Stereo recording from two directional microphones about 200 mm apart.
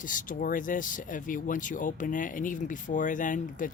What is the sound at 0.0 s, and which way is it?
Speech, 40° left (ahead or behind).